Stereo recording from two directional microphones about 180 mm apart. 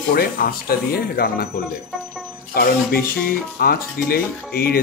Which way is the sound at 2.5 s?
60° left (ahead or behind).